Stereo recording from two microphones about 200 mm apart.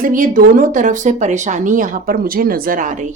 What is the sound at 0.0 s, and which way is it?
A woman's voice, 45° right (ahead or behind).